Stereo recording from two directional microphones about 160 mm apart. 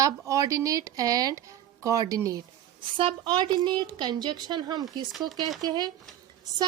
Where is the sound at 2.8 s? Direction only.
30° right (ahead or behind).